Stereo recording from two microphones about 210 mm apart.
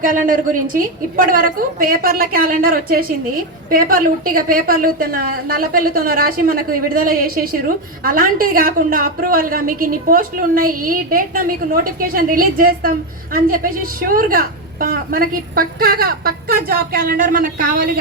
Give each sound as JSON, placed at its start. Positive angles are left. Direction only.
{"t": 0.0, "sound": "a woman's voice", "side_deg": -40}